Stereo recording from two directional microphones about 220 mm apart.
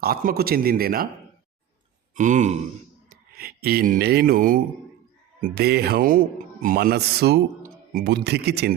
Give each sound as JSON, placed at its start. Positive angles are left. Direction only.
{"t": 0.0, "sound": "a man's voice", "side_deg": -40}
{"t": 2.1, "sound": "grunt", "side_deg": -35}
{"t": 3.3, "sound": "a man's voice", "side_deg": -45}